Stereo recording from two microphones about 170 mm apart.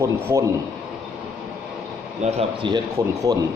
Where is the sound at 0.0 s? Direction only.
20° right (ahead or behind).